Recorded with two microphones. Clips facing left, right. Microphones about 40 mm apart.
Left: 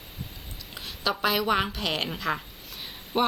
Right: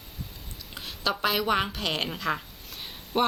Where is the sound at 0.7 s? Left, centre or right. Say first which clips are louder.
Even; centre.